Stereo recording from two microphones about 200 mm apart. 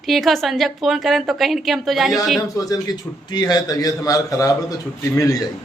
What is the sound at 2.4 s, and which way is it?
A man's voice, 15° left (ahead or behind).